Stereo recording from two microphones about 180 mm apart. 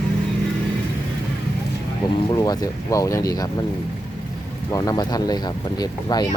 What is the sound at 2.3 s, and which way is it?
Speech, 20° left (ahead or behind).